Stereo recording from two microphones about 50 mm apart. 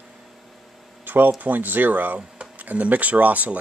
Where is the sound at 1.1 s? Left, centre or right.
Right.